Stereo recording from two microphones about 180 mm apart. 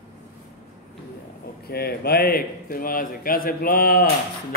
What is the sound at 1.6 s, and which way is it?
A man's voice, 60° left (ahead or behind).